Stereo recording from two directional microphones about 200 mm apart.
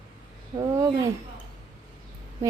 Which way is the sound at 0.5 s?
20° right (ahead or behind).